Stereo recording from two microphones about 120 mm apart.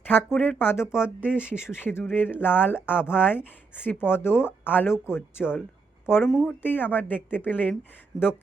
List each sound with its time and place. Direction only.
0.0 s speech: 15° left (ahead or behind)
0.9 s speech: 10° right (ahead or behind)
1.6 s speech: 20° left (ahead or behind)